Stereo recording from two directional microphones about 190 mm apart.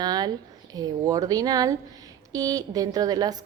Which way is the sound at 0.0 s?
20° right (ahead or behind).